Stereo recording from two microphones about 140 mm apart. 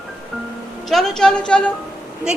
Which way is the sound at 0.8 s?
Centre (ahead or behind).